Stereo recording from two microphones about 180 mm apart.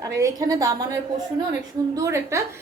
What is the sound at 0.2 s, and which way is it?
Speech, 20° right (ahead or behind).